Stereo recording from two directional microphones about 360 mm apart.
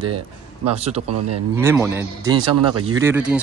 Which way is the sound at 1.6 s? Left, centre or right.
Centre.